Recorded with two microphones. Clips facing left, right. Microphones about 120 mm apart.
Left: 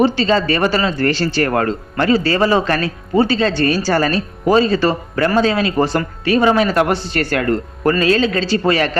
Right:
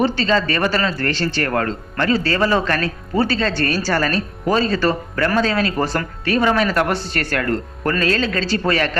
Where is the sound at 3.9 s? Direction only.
30° left (ahead or behind).